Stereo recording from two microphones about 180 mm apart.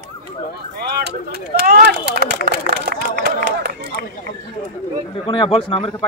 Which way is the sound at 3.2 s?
65° right (ahead or behind).